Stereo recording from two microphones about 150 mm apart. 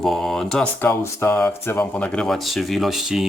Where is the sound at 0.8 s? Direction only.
15° left (ahead or behind).